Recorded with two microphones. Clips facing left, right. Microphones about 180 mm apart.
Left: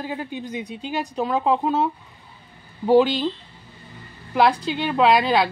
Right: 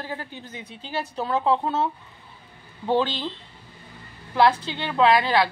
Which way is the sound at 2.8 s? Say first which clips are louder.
Left 7 dB; 10° left (ahead or behind).